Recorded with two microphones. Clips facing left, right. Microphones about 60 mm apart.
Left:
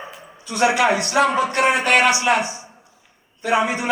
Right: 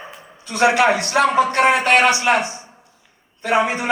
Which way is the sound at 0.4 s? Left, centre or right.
Right.